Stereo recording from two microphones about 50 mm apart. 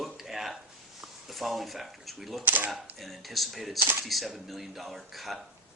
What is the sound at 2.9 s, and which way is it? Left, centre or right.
Speech, centre.